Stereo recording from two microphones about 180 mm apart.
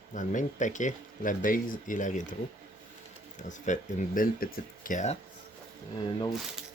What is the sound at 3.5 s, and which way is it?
Speech, 45° left (ahead or behind).